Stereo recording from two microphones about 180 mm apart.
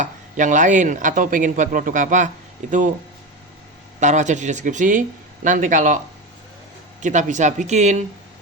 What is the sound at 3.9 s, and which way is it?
A man's voice, 40° right (ahead or behind).